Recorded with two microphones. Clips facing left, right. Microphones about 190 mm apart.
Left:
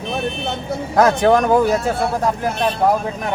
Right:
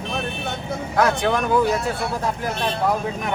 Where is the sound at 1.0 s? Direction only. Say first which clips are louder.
Left 6 dB; 40° left (ahead or behind).